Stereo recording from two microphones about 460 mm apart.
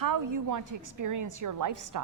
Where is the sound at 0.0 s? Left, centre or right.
Right.